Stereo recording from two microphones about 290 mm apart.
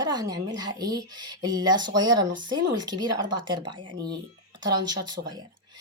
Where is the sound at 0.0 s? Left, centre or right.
Centre.